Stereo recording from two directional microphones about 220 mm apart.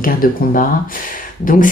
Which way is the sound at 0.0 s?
40° left (ahead or behind).